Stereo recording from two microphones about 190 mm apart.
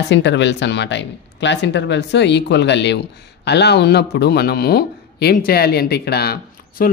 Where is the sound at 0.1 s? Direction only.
70° left (ahead or behind).